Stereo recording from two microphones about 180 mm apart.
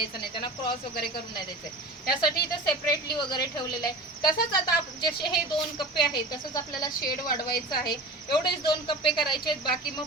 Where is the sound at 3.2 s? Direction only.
25° left (ahead or behind).